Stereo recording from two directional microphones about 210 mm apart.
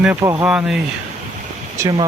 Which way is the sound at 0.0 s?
10° right (ahead or behind).